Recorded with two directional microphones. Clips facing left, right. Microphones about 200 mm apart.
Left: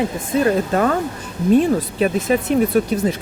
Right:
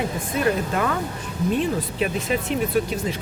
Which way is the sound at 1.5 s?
45° left (ahead or behind).